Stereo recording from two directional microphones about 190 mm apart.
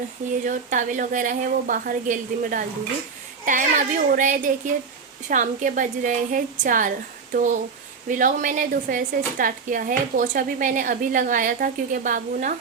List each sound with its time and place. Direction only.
0.4 s a woman's voice: 45° right (ahead or behind)
8.0 s a woman's voice: 45° right (ahead or behind)